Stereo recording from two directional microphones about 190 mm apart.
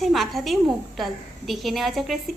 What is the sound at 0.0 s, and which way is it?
A woman's voice, centre (ahead or behind).